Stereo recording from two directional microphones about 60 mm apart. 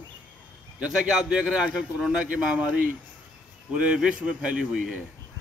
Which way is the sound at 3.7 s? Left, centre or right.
Centre.